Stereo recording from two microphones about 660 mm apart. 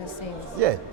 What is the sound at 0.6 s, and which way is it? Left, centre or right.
Speech, right.